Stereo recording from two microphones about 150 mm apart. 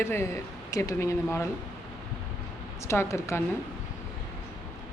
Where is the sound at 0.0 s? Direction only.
15° left (ahead or behind).